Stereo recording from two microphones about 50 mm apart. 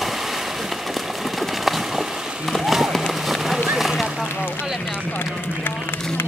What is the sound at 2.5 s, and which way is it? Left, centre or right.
Run, centre.